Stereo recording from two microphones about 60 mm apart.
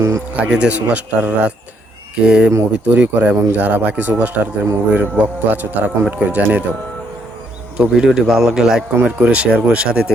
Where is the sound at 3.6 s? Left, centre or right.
Right.